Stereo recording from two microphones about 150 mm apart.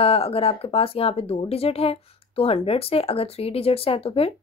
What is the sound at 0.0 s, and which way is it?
Speech, 40° left (ahead or behind).